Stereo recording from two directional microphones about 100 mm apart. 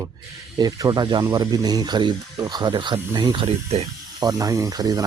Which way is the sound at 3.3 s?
80° right.